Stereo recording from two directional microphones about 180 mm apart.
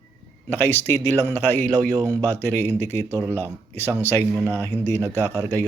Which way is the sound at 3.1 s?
15° right (ahead or behind).